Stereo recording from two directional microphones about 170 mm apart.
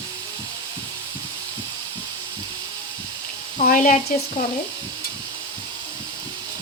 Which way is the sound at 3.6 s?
50° left (ahead or behind).